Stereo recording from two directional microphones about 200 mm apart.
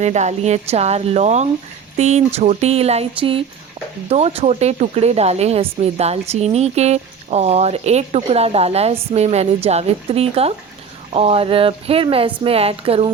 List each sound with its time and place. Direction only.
0.0 s speech: 35° right (ahead or behind)